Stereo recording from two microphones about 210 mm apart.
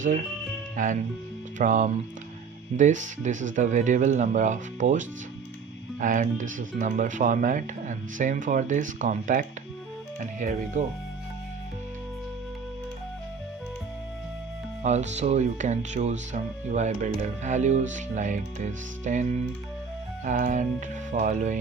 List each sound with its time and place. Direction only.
0.8 s speech: 40° right (ahead or behind)
14.8 s speech: 35° right (ahead or behind)
20.2 s speech: 35° right (ahead or behind)